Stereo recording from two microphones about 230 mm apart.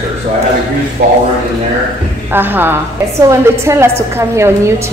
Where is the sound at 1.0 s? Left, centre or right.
Right.